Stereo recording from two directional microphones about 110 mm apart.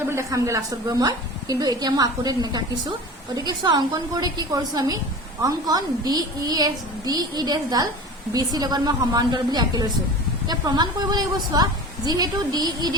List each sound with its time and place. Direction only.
0.1 s a woman's voice: 25° right (ahead or behind)